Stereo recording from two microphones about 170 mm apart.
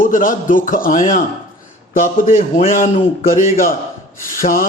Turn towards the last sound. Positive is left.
turn(degrees=55)  # may be behind; listen again after turning